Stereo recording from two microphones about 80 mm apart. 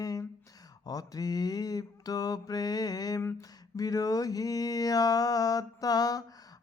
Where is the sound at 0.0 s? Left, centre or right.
Left.